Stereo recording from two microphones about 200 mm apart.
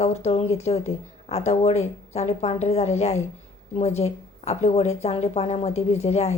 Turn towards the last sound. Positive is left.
turn(degrees=35)  # may be behind; listen again after turning